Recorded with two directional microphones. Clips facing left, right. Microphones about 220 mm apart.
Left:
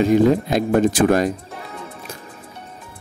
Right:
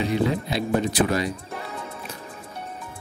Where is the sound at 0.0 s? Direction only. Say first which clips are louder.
Left 9 dB; 45° left (ahead or behind).